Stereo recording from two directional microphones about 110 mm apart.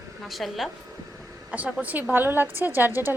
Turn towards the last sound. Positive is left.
turn(degrees=-20)  # may be behind; listen again after turning